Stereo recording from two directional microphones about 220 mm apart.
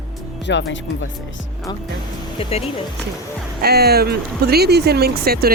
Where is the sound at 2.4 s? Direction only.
25° left (ahead or behind).